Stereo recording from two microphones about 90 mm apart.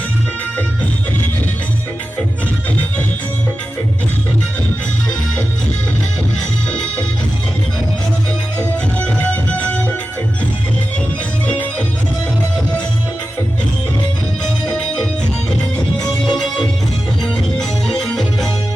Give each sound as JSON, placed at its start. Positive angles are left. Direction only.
{"t": 6.7, "sound": "music", "side_deg": 10}
{"t": 9.0, "sound": "music", "side_deg": 15}
{"t": 11.4, "sound": "music", "side_deg": 15}
{"t": 16.0, "sound": "music", "side_deg": 5}